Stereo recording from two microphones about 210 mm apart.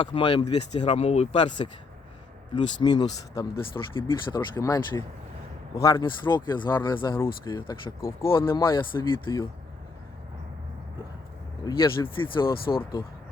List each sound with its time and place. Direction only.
0.0 s speech: 25° left (ahead or behind)
2.8 s speech: 20° left (ahead or behind)
11.6 s speech: 15° left (ahead or behind)